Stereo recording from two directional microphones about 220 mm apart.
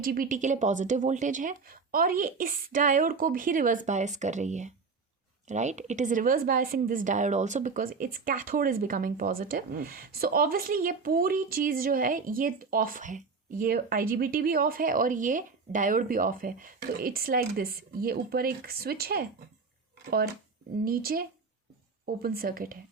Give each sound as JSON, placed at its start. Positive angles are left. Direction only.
{"t": 0.0, "sound": "speech", "side_deg": -40}
{"t": 20.8, "sound": "speech", "side_deg": -45}